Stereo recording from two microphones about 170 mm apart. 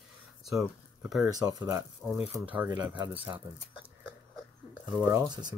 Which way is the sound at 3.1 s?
10° right (ahead or behind).